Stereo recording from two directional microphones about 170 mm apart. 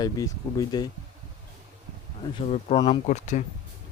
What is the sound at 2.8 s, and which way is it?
Speech, 40° left (ahead or behind).